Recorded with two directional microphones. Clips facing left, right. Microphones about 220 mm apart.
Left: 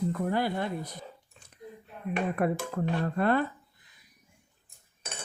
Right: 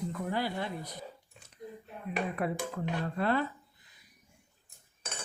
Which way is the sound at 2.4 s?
55° left (ahead or behind).